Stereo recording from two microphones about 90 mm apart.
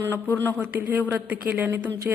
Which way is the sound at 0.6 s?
20° right (ahead or behind).